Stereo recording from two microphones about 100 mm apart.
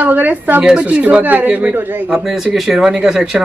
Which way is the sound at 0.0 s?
15° right (ahead or behind).